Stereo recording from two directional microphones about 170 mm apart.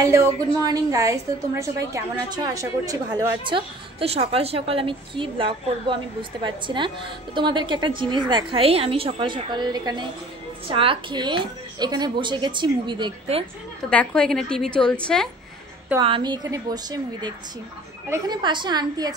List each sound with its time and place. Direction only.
0.0 s a woman's voice: 20° right (ahead or behind)
13.8 s a woman's voice: 5° left (ahead or behind)
16.0 s a woman's voice: 30° right (ahead or behind)